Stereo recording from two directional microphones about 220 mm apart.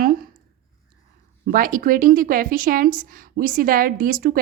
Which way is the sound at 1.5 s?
40° right (ahead or behind).